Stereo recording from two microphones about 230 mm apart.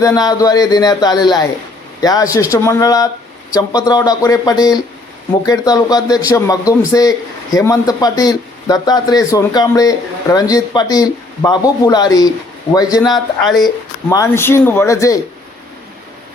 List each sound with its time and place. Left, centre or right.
0.0 s a man's voice: centre
13.1 s speech: centre
14.1 s a man's voice: centre